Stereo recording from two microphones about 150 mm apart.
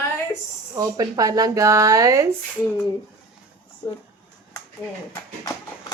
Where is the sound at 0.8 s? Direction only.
25° right (ahead or behind).